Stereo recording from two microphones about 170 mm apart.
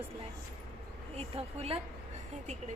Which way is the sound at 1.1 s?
35° right (ahead or behind).